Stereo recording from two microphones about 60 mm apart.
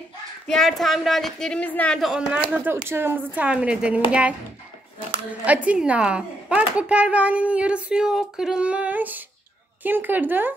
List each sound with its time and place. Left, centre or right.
0.5 s speech: centre
1.5 s a woman's voice: centre
2.0 s speech: centre
2.3 s a woman's voice: right
3.3 s a child's voice: right